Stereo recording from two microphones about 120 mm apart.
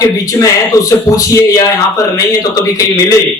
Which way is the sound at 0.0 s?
25° left (ahead or behind).